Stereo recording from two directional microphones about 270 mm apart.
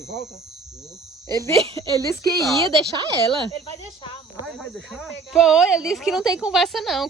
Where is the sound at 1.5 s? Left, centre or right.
Right.